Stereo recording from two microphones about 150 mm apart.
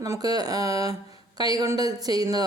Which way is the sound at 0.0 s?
25° right (ahead or behind).